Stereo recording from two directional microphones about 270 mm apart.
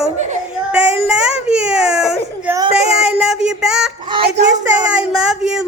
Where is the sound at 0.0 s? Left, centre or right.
Right.